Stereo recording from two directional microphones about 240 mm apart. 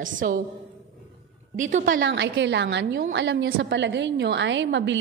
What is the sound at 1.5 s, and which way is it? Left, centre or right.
A woman's voice, right.